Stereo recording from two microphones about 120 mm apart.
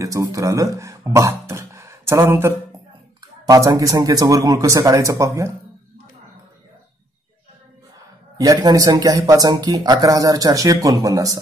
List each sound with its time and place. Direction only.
0.0 s a man's voice: 25° right (ahead or behind)
8.4 s a man's voice: 30° right (ahead or behind)